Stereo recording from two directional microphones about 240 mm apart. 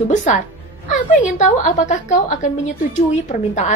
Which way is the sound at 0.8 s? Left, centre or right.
Left.